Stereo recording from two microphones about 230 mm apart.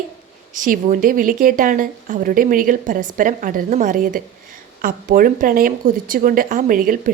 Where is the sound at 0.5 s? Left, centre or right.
Right.